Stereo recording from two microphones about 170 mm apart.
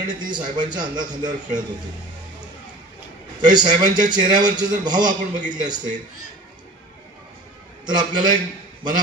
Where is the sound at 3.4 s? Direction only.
25° right (ahead or behind).